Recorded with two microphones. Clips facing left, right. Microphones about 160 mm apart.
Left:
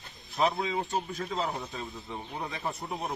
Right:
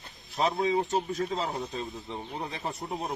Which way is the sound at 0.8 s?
40° right (ahead or behind).